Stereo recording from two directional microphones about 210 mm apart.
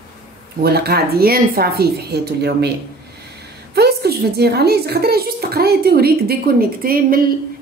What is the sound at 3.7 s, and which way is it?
A woman's voice, 50° right (ahead or behind).